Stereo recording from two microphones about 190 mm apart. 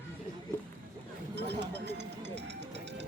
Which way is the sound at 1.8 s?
65° right (ahead or behind).